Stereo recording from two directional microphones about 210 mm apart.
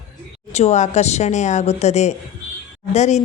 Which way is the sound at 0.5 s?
30° left (ahead or behind).